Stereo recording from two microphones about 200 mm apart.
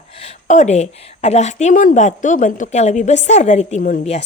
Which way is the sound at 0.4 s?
35° left (ahead or behind).